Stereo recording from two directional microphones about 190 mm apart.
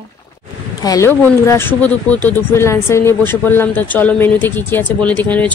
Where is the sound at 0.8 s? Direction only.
15° left (ahead or behind).